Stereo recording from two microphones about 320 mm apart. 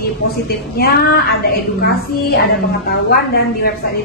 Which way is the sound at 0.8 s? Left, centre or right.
Left.